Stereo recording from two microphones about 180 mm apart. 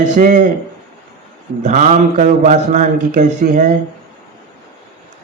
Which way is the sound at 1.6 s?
40° right (ahead or behind).